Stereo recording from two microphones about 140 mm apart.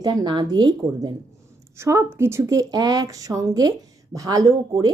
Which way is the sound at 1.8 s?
20° right (ahead or behind).